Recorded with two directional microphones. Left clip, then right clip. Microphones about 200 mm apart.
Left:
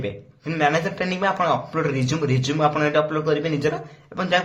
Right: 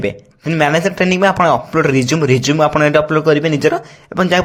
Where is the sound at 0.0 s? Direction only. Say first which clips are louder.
Right 9 dB; 45° right (ahead or behind).